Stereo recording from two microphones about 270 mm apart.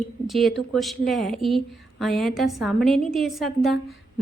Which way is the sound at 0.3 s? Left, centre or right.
Centre.